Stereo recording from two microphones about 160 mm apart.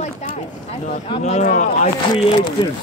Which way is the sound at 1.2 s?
50° left (ahead or behind).